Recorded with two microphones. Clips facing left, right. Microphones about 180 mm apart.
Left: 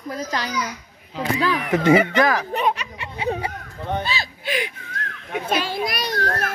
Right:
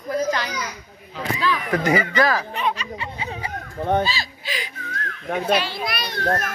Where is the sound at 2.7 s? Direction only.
70° left (ahead or behind).